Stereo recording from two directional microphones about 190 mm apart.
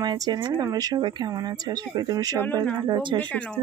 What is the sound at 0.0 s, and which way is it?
Speech, 20° right (ahead or behind).